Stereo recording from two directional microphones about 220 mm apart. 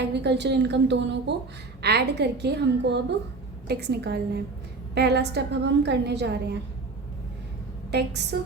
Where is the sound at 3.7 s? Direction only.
50° right (ahead or behind).